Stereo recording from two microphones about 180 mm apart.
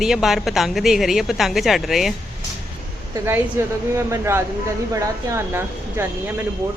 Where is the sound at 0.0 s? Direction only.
Centre (ahead or behind).